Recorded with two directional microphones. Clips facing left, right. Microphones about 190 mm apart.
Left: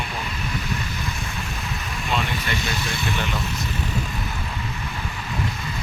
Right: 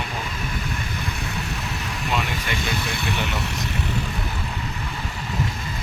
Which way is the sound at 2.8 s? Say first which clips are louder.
Even; 60° right (ahead or behind).